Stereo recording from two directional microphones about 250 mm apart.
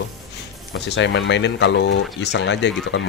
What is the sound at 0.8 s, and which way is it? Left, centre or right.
Speech, left.